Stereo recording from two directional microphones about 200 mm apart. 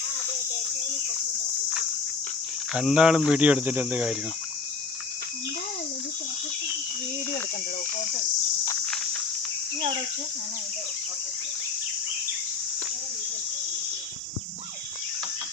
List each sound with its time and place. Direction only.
2.7 s speech: 5° right (ahead or behind)